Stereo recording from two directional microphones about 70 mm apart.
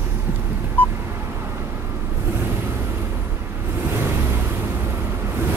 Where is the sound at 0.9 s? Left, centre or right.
Right.